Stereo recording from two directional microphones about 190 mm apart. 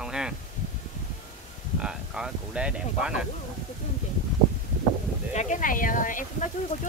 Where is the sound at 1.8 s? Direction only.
5° right (ahead or behind).